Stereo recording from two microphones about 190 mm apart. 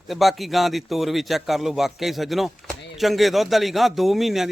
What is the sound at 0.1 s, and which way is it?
A man's voice, centre (ahead or behind).